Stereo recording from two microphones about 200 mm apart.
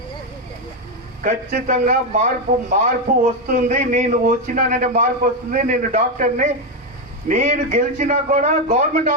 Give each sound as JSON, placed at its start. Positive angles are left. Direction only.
{"t": 1.2, "sound": "a man's voice", "side_deg": -40}